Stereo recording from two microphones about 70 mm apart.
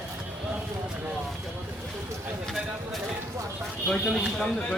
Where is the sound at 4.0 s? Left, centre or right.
Centre.